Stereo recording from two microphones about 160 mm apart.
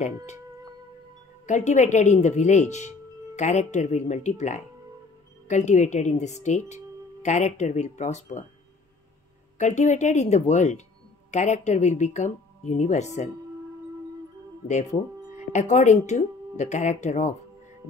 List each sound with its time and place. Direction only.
1.4 s speech: 45° left (ahead or behind)
9.6 s speech: 45° left (ahead or behind)
15.5 s speech: 50° left (ahead or behind)